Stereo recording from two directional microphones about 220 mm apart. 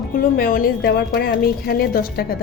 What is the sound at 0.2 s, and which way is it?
A woman's voice, 40° left (ahead or behind).